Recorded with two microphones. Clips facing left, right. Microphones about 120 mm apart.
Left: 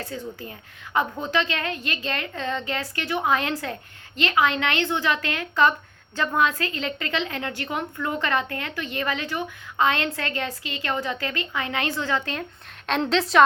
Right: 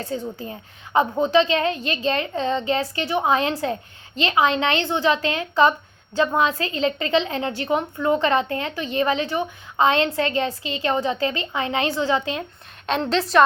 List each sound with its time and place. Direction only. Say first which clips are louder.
0.1 s a woman's voice: right 5 dB; 25° right (ahead or behind)
12.8 s a woman's voice: right 1 dB; 5° right (ahead or behind)